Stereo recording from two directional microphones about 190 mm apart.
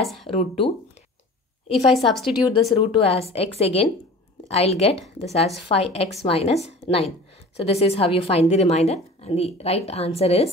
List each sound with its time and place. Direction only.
0.0 s a sound: centre (ahead or behind)
0.3 s speech: 30° left (ahead or behind)
1.9 s a woman's voice: centre (ahead or behind)
2.2 s a woman's voice: 25° left (ahead or behind)